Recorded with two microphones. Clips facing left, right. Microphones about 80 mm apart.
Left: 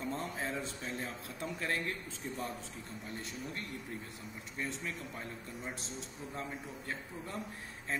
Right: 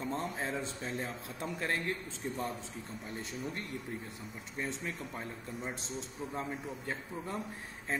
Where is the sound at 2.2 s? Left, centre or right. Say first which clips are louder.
Right 4 dB; right.